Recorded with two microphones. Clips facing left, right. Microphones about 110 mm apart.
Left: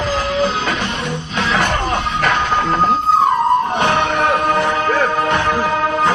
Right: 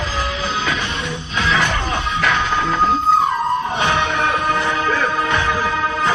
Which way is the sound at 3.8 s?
50° left (ahead or behind).